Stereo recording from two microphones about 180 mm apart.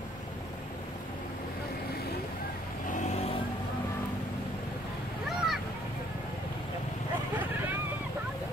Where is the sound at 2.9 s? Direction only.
40° left (ahead or behind).